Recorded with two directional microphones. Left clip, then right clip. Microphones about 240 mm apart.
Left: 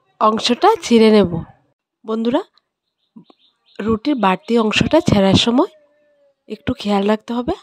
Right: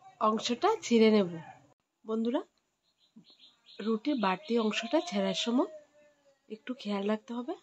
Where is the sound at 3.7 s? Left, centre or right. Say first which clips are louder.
Left 13 dB; left.